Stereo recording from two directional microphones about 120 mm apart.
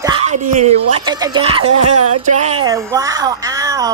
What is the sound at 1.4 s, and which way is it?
Speech, 50° right (ahead or behind).